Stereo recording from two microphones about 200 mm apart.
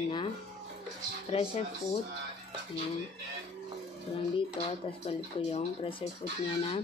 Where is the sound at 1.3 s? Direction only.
30° left (ahead or behind).